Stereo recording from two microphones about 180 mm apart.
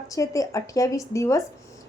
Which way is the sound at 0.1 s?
20° left (ahead or behind).